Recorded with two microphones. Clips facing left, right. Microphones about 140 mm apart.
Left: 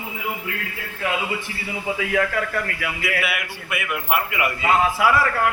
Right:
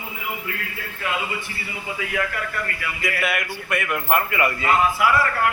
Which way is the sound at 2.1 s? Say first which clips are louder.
Left 4 dB; 85° left.